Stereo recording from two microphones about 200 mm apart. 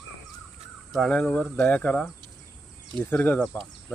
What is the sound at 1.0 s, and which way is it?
Speech, 5° left (ahead or behind).